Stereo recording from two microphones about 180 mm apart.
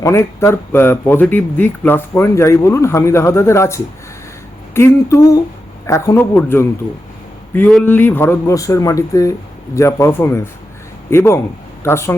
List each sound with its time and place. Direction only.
0.0 s speech: 15° left (ahead or behind)